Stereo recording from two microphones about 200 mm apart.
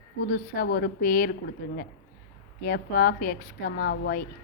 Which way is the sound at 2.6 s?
50° left (ahead or behind).